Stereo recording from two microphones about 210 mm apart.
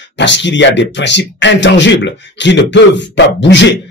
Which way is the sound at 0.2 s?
60° left (ahead or behind).